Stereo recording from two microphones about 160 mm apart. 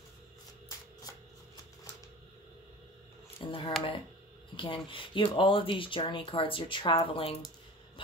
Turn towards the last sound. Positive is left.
turn(degrees=35)  # may be behind; listen again after turning